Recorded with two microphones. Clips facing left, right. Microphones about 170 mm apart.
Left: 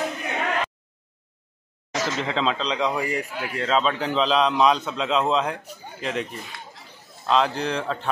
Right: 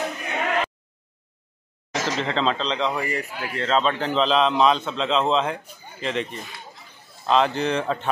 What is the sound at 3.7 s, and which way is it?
A man's voice, 5° left (ahead or behind).